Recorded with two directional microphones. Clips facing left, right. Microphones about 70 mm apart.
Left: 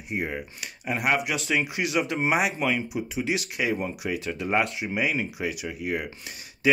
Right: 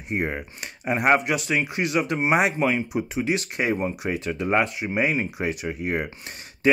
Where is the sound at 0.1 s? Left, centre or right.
Right.